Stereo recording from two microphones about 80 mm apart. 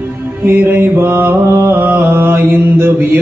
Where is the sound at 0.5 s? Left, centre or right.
Right.